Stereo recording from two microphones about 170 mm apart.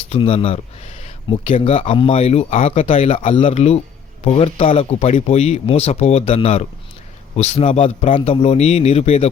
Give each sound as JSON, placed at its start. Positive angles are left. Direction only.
{"t": 0.1, "sound": "speech", "side_deg": 35}